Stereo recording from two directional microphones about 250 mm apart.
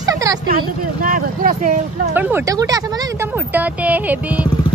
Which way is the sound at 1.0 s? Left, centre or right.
Right.